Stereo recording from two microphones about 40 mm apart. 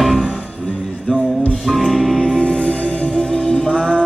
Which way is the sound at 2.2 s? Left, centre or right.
Left.